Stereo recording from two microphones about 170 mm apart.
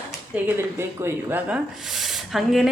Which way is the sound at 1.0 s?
10° right (ahead or behind).